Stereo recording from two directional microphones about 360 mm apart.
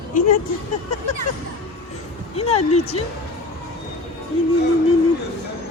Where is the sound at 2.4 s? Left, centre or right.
Centre.